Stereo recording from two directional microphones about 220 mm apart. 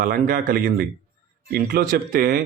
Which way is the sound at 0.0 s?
40° right (ahead or behind).